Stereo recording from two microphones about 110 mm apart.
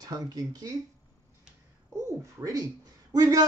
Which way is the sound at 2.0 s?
30° right (ahead or behind).